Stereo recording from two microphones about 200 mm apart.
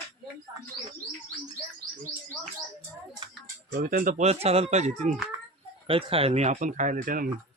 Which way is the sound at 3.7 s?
45° right (ahead or behind).